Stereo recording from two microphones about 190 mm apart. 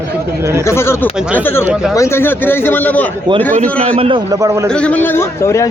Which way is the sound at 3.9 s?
25° right (ahead or behind).